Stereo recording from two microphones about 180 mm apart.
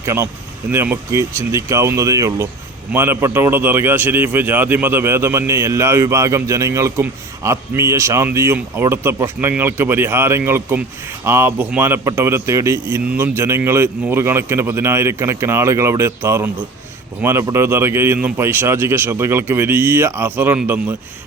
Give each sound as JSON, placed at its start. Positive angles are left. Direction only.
{"t": 0.0, "sound": "a man's voice", "side_deg": -15}